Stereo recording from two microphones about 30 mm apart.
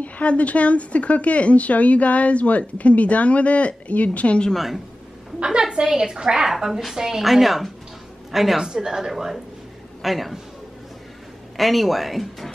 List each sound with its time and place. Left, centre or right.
0.0 s a woman's voice: left
5.4 s a woman's voice: right
6.4 s a woman's voice: centre
7.2 s a woman's voice: centre
8.5 s speech: centre
10.0 s speech: centre
11.5 s speech: centre